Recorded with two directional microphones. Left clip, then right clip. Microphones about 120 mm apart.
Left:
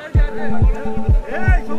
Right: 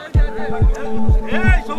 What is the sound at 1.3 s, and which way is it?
Music, 35° right (ahead or behind).